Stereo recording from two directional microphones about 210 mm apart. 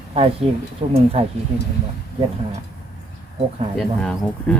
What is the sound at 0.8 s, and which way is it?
Speech, 25° right (ahead or behind).